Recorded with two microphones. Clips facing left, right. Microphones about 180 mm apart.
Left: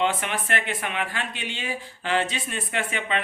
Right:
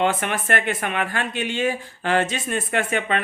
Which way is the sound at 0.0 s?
50° right (ahead or behind).